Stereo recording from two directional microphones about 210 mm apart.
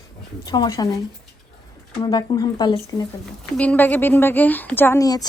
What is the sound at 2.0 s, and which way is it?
Speech, 20° left (ahead or behind).